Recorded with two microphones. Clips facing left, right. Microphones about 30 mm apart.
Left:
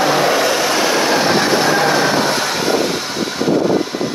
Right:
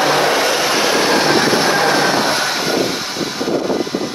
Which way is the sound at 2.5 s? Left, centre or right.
Centre.